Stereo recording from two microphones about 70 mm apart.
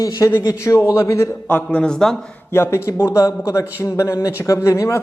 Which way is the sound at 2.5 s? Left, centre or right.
Left.